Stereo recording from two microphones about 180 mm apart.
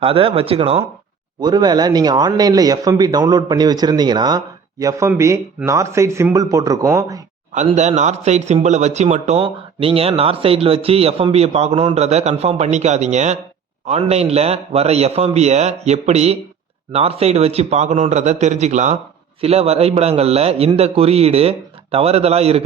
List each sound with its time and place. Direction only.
0.0 s a man's voice: 30° right (ahead or behind)
7.5 s speech: 40° right (ahead or behind)